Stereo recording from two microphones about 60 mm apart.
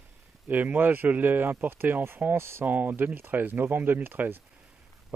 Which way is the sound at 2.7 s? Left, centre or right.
Right.